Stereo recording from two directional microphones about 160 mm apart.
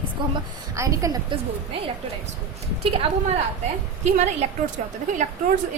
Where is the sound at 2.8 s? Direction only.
35° right (ahead or behind).